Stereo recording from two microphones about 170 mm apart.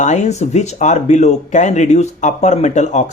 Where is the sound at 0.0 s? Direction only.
45° left (ahead or behind).